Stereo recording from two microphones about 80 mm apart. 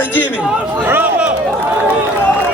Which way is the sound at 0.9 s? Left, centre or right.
Right.